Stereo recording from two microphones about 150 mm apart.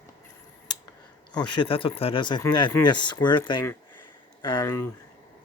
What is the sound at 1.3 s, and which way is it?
Speech, 30° left (ahead or behind).